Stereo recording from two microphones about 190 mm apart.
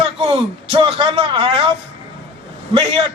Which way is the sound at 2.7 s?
30° right (ahead or behind).